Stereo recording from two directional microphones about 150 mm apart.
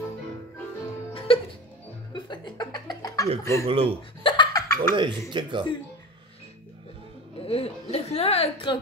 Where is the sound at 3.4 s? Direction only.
20° left (ahead or behind).